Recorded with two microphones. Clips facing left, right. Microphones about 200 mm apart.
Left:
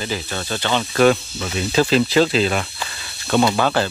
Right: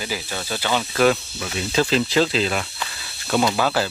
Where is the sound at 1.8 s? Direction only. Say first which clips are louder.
Left 4 dB; 60° left (ahead or behind).